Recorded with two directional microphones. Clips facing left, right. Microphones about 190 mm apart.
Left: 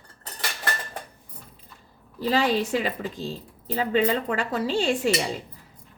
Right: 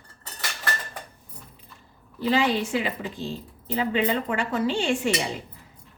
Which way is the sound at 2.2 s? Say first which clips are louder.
Even; 40° left (ahead or behind).